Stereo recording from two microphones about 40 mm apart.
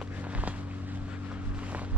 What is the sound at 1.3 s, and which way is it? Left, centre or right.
Vehicle, right.